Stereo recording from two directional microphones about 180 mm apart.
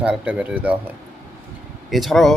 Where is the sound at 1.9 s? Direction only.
Centre (ahead or behind).